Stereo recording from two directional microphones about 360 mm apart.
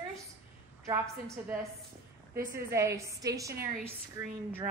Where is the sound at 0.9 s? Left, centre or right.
Centre.